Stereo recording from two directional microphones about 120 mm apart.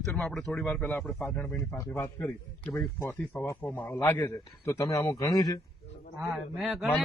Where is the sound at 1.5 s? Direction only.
20° left (ahead or behind).